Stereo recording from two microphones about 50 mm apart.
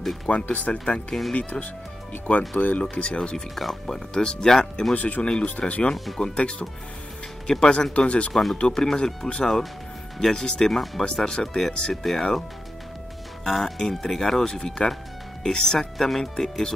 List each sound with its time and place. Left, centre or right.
0.3 s speech: left
3.3 s speech: centre
4.9 s speech: left
5.2 s speech: centre
8.3 s speech: centre
8.5 s speech: centre
13.4 s speech: centre